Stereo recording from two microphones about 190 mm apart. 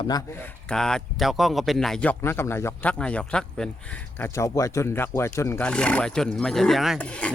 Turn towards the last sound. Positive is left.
turn(degrees=5)  # may be behind; listen again after turning